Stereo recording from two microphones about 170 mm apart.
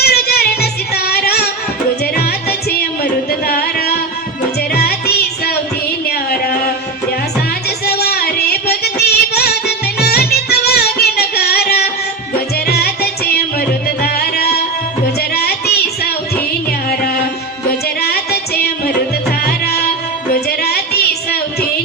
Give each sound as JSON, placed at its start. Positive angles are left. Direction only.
{"t": 0.0, "sound": "music", "side_deg": 70}
{"t": 7.9, "sound": "music", "side_deg": 70}
{"t": 15.2, "sound": "child singing", "side_deg": 65}
{"t": 18.0, "sound": "music", "side_deg": 70}
{"t": 20.5, "sound": "child singing", "side_deg": 70}